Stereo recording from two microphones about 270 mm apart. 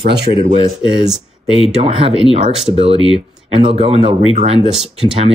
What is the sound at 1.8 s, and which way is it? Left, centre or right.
Speech, right.